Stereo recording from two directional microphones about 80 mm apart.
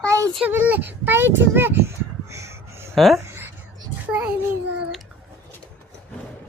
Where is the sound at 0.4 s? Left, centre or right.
Right.